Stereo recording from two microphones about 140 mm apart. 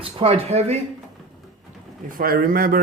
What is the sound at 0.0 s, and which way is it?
Speech, 45° right (ahead or behind).